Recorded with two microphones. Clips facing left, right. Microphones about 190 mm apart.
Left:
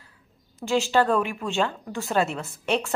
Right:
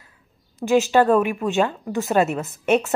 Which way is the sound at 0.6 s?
15° right (ahead or behind).